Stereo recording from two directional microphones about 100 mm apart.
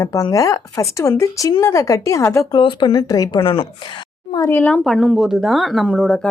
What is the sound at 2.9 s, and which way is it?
Speech, 40° left (ahead or behind).